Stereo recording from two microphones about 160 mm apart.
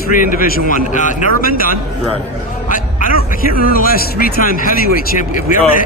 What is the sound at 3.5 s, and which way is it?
Speech, 65° left (ahead or behind).